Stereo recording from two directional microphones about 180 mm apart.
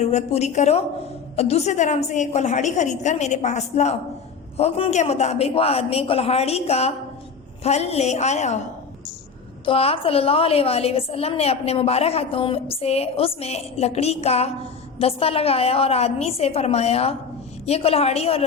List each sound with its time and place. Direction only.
0.0 s a woman's voice: 35° left (ahead or behind)
9.6 s a woman's voice: 30° left (ahead or behind)